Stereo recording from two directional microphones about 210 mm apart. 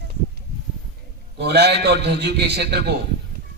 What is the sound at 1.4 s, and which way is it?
A man's voice, 50° right (ahead or behind).